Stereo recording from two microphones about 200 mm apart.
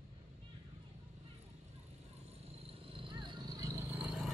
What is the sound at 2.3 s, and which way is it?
Vehicle, 30° right (ahead or behind).